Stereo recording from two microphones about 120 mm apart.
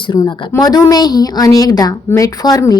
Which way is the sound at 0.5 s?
30° left (ahead or behind).